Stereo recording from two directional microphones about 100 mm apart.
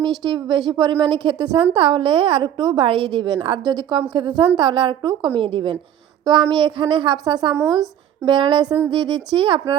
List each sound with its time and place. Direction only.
0.0 s a woman's voice: 45° right (ahead or behind)